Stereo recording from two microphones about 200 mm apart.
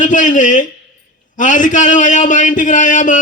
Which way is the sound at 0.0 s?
40° left (ahead or behind).